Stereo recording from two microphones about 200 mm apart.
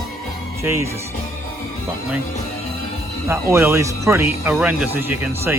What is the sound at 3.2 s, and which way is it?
Speech, 10° right (ahead or behind).